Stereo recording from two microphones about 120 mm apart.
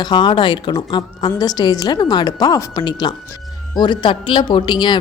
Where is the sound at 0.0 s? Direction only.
35° left (ahead or behind).